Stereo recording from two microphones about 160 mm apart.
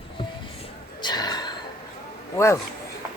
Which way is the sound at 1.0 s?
25° left (ahead or behind).